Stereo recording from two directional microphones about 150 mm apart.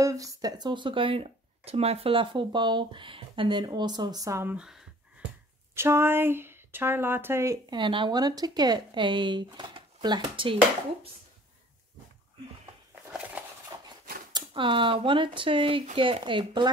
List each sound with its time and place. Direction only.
0.0 s speech: 20° right (ahead or behind)
4.6 s speech: 5° right (ahead or behind)
5.8 s speech: 15° right (ahead or behind)
7.7 s speech: 35° right (ahead or behind)
13.7 s a sound: 30° right (ahead or behind)
14.3 s speech: 35° right (ahead or behind)